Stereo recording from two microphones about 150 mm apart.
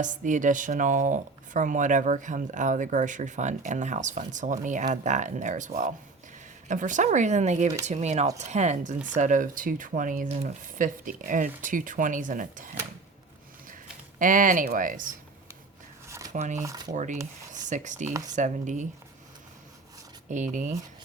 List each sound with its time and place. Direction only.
0.0 s speech: 60° right (ahead or behind)
14.2 s speech: 60° right (ahead or behind)
16.0 s shuffling cards: 20° right (ahead or behind)
16.3 s speech: 55° right (ahead or behind)
16.6 s speech: 25° right (ahead or behind)
16.9 s speech: 55° right (ahead or behind)
20.2 s speech: 55° right (ahead or behind)